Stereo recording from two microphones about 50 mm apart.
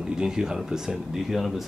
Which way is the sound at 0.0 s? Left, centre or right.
Centre.